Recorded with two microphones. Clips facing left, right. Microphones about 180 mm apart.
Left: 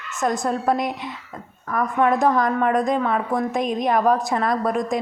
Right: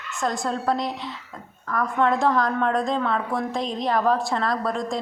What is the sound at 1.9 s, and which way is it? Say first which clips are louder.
A woman's voice: left 2 dB; 15° left (ahead or behind).